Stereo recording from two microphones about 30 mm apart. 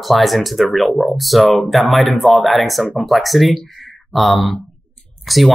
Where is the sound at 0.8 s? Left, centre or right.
Centre.